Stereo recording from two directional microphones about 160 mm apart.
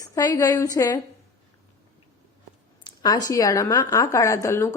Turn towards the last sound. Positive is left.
turn(degrees=15)  # may be behind; listen again after turning